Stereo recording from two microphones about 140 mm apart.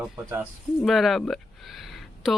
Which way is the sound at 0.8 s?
Centre (ahead or behind).